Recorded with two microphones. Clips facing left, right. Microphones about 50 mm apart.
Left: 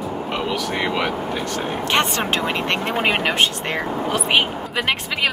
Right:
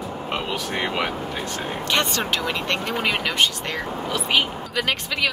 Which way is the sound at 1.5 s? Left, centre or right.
Left.